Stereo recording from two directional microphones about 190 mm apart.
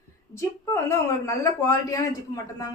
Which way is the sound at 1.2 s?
15° left (ahead or behind).